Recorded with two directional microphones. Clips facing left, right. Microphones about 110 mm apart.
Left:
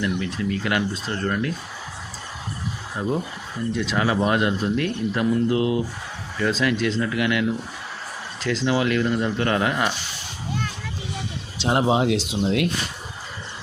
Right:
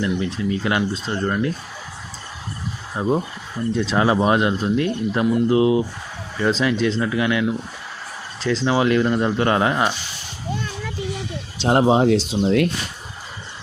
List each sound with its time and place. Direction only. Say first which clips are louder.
0.0 s speech: right 3 dB; 30° right (ahead or behind)
3.0 s speech: right 4 dB; 25° right (ahead or behind)
11.6 s speech: right 4 dB; 35° right (ahead or behind)